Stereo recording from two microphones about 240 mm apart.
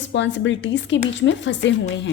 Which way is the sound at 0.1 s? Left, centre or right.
Left.